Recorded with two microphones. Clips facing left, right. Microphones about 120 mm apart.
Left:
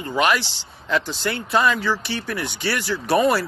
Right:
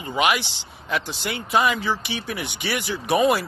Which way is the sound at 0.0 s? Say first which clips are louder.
Left 2 dB; 15° right (ahead or behind).